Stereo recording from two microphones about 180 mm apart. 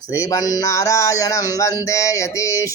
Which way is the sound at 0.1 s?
15° left (ahead or behind).